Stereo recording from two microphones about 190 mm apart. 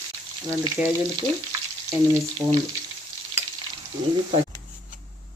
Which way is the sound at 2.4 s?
20° right (ahead or behind).